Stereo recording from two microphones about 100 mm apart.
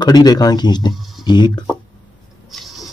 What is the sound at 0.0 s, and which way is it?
Speech, 45° left (ahead or behind).